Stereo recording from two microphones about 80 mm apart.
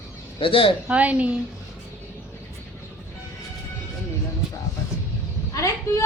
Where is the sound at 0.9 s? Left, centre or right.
Centre.